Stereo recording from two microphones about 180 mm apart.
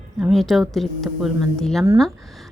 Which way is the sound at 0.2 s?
Centre (ahead or behind).